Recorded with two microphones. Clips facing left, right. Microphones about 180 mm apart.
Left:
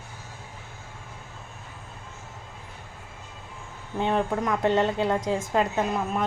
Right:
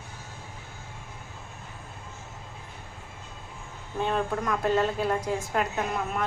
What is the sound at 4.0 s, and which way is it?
A woman's voice, 20° left (ahead or behind).